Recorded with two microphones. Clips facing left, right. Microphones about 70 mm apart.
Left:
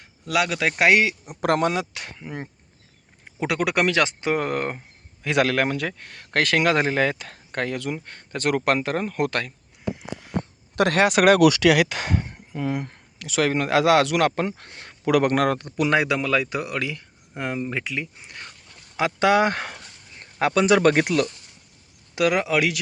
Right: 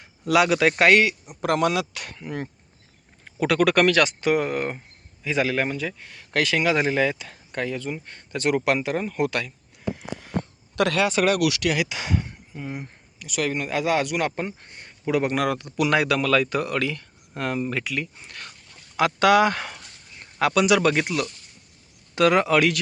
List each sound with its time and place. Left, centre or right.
0.3 s speech: centre
0.8 s speech: centre
1.3 s speech: left
1.6 s speech: left
2.1 s speech: centre
4.4 s speech: left
5.2 s speech: left
10.0 s a sound: centre
10.8 s speech: left
11.9 s speech: left
12.5 s speech: left
22.1 s speech: centre